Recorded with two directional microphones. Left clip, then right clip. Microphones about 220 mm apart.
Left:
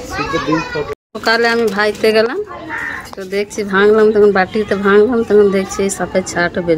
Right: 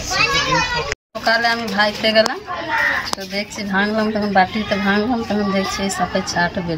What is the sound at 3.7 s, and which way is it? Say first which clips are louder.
Speech: left 9 dB; 25° left (ahead or behind).